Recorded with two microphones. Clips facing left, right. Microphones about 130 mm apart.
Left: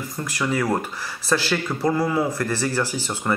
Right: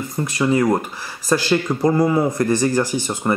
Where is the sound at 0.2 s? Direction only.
20° right (ahead or behind).